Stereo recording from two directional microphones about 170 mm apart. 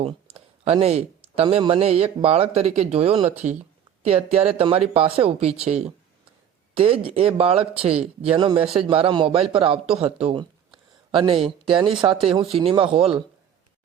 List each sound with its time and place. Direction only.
0.0 s speech: 35° right (ahead or behind)